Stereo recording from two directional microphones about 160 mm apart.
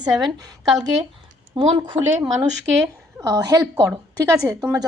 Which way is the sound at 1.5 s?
30° right (ahead or behind).